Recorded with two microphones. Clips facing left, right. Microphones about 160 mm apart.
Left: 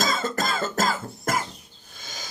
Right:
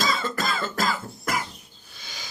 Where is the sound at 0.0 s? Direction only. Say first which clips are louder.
Left 1 dB; 45° left (ahead or behind).